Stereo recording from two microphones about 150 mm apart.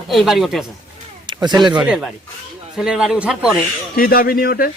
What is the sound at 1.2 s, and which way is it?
Speech, 30° right (ahead or behind).